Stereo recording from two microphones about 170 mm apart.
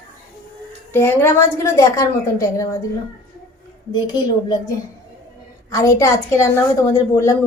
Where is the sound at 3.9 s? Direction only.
25° left (ahead or behind).